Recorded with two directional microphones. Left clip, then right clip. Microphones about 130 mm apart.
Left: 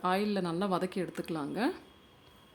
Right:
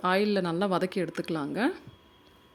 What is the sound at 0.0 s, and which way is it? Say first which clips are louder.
Speech: right 5 dB; 25° right (ahead or behind).